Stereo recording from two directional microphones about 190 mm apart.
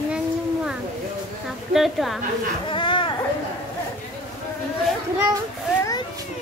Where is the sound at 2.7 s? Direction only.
25° left (ahead or behind).